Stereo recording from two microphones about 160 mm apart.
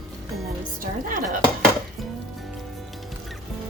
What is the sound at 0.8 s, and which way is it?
Speech, 60° right (ahead or behind).